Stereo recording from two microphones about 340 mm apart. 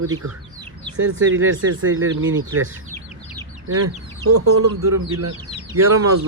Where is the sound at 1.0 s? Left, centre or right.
Right.